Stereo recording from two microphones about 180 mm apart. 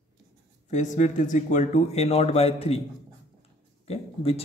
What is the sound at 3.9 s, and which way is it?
Speech, 35° left (ahead or behind).